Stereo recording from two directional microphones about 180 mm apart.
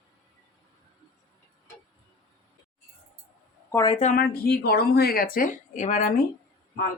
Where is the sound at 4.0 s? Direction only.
45° left (ahead or behind).